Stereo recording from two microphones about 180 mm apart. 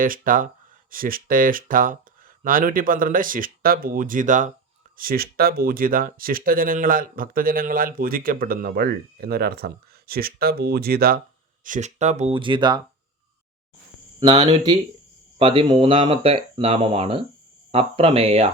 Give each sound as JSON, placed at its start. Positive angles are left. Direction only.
{"t": 0.0, "sound": "speech", "side_deg": -50}
{"t": 4.9, "sound": "speech", "side_deg": -55}
{"t": 11.6, "sound": "speech", "side_deg": -45}
{"t": 14.2, "sound": "speech", "side_deg": -25}